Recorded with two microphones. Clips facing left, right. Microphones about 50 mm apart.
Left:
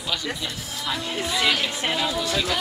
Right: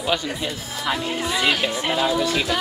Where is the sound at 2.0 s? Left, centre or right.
Right.